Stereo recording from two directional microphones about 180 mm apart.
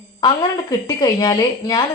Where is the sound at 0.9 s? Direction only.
20° left (ahead or behind).